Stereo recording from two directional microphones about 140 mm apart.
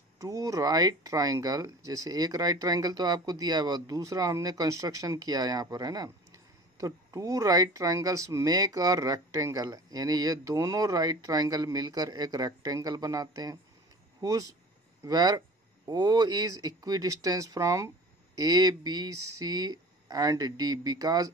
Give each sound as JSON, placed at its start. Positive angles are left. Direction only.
{"t": 0.2, "sound": "speech", "side_deg": -25}